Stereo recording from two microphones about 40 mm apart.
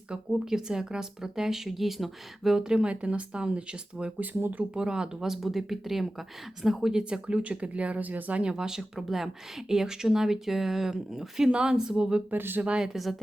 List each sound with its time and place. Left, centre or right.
0.3 s speech: centre
2.8 s speech: right
4.2 s speech: right
4.7 s speech: right
7.0 s speech: right
8.4 s speech: right
11.5 s speech: right
12.3 s speech: right
12.8 s speech: centre